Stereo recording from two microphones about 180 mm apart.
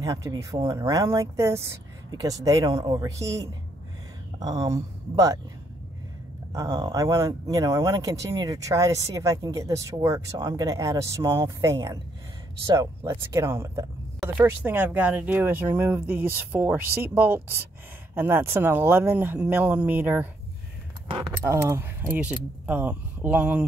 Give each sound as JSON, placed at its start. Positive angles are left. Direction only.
{"t": 0.0, "sound": "speech", "side_deg": -20}
{"t": 6.5, "sound": "speech", "side_deg": -20}
{"t": 21.5, "sound": "speech", "side_deg": -15}